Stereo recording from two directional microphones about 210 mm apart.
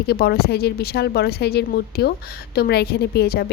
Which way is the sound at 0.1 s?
50° left (ahead or behind).